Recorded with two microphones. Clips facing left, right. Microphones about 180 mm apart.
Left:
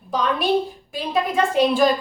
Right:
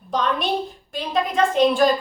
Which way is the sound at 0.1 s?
5° left (ahead or behind).